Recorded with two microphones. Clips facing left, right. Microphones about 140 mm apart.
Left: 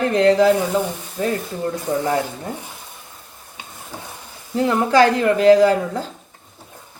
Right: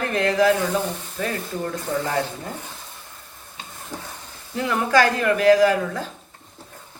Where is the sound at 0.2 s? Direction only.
30° left (ahead or behind).